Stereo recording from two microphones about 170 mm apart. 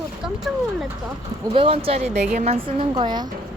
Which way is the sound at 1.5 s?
35° right (ahead or behind).